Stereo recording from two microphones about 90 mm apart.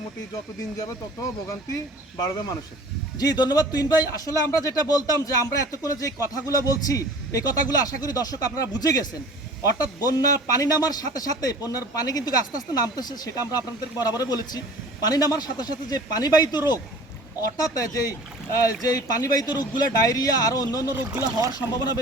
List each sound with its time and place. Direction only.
1.7 s speech: 45° left (ahead or behind)
17.6 s speech: 45° left (ahead or behind)
20.9 s speech: 30° right (ahead or behind)
21.7 s speech: 50° left (ahead or behind)